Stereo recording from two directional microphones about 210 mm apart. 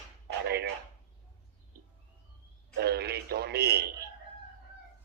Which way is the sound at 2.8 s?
50° right (ahead or behind).